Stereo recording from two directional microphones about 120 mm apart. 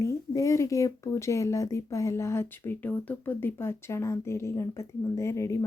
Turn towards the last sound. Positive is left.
turn(degrees=25)  # may be behind; listen again after turning